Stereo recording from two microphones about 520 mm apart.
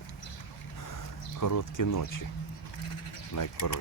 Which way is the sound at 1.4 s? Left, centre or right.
Left.